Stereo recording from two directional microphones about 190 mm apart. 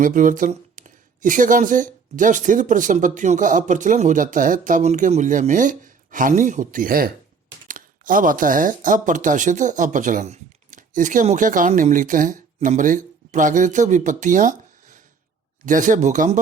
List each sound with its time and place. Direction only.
0.0 s speech: 45° right (ahead or behind)